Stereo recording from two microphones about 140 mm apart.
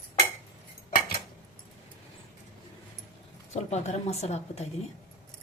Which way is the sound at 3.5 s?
55° left (ahead or behind).